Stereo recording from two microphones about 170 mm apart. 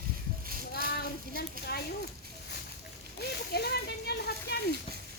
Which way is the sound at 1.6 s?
55° right (ahead or behind).